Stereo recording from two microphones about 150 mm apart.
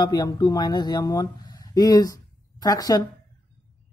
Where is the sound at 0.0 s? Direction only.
30° left (ahead or behind).